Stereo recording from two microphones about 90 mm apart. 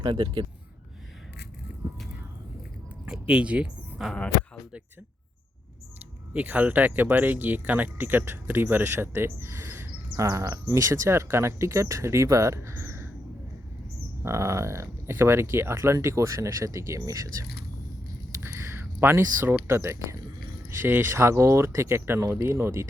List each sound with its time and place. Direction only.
0.0 s speech: 60° right (ahead or behind)
3.1 s a sound: 10° right (ahead or behind)
6.3 s speech: 20° right (ahead or behind)
14.2 s speech: 30° right (ahead or behind)
18.3 s a sound: 30° right (ahead or behind)
19.5 s speech: 30° right (ahead or behind)
22.2 s speech: 40° right (ahead or behind)